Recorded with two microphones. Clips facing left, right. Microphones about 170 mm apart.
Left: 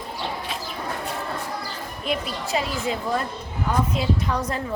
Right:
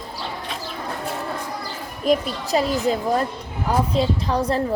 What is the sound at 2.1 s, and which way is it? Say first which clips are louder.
A woman's voice: right 7 dB; 40° right (ahead or behind).